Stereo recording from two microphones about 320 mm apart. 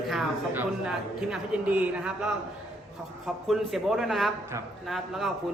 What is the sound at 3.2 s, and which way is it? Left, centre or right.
A man's voice, centre.